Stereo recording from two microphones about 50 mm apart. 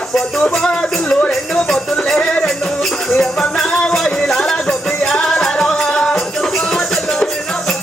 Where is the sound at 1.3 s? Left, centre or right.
Centre.